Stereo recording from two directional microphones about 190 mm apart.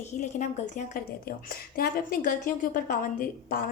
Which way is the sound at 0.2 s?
40° left (ahead or behind).